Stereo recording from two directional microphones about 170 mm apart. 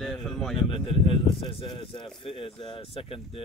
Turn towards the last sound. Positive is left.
turn(degrees=35)  # may be behind; listen again after turning